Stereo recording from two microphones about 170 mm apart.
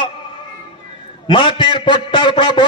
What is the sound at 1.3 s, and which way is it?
A man's voice, 30° left (ahead or behind).